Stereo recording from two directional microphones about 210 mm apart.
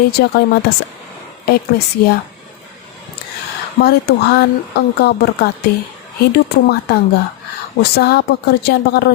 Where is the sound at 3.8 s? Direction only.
50° left (ahead or behind).